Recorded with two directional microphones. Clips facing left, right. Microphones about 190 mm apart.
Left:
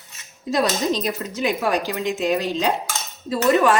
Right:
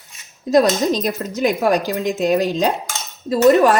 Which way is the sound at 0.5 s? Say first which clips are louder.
Right 6 dB; 45° right (ahead or behind).